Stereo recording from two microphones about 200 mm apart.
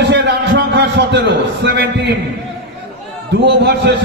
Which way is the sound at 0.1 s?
60° right (ahead or behind).